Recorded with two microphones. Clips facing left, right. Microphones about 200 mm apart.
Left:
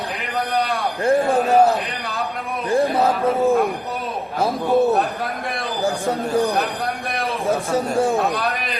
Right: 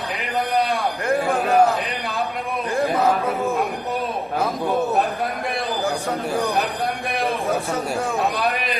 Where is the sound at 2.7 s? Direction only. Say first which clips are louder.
Left 2 dB; 30° left (ahead or behind).